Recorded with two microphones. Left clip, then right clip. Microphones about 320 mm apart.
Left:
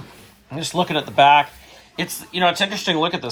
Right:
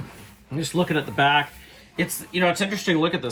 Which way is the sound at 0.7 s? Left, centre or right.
Centre.